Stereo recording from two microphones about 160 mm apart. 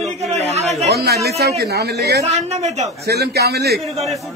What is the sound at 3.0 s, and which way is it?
Speech, 85° right.